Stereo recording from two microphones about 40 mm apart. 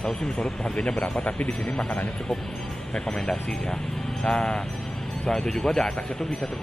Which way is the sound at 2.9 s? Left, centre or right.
Centre.